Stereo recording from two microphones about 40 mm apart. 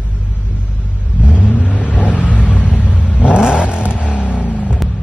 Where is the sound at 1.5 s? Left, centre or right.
Left.